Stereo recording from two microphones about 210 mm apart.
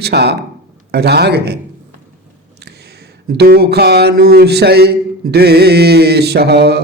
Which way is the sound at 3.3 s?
50° right (ahead or behind).